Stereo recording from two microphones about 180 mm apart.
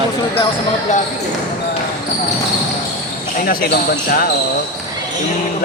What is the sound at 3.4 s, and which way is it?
Speech, 55° left (ahead or behind).